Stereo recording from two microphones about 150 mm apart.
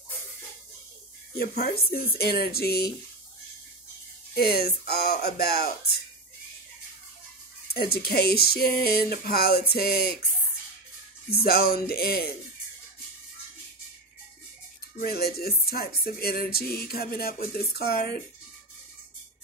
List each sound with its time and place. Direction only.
1.6 s speech: 90° left
4.4 s speech: 90° left
7.7 s speech: 90° left
11.2 s speech: 90° left
15.0 s speech: 85° left